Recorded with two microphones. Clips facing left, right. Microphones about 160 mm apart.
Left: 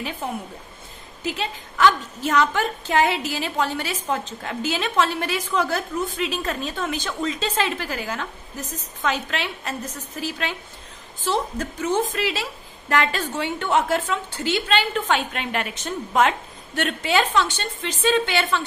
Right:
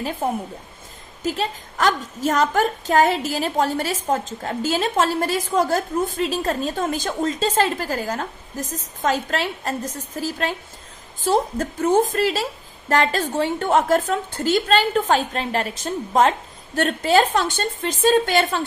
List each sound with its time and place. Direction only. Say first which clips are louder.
0.2 s a woman's voice: right 5 dB; 45° right (ahead or behind)